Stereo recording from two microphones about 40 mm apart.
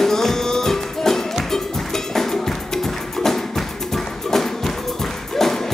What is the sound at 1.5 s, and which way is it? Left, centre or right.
Cowbell, centre.